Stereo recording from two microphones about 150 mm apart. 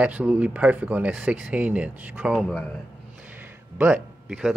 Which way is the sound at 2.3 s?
5° left (ahead or behind).